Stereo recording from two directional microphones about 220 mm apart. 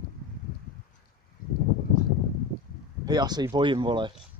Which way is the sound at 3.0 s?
20° right (ahead or behind).